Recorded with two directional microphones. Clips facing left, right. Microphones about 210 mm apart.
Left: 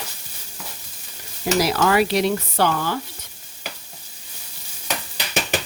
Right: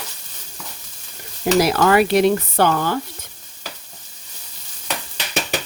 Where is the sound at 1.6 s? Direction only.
50° right (ahead or behind).